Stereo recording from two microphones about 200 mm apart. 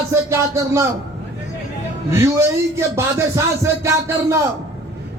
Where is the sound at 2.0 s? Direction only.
15° right (ahead or behind).